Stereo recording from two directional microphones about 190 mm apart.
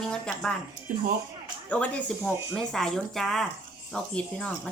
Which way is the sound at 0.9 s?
50° right (ahead or behind).